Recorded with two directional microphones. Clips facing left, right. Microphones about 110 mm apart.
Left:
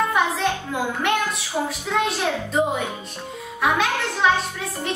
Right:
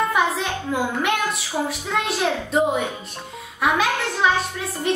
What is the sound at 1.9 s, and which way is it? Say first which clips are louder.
A woman's voice: left 1 dB; centre (ahead or behind).